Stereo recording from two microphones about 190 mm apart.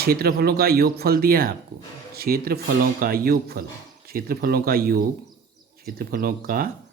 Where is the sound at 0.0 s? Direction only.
55° right (ahead or behind).